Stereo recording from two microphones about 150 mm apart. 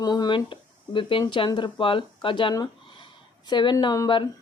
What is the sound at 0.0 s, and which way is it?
Speech, 25° left (ahead or behind).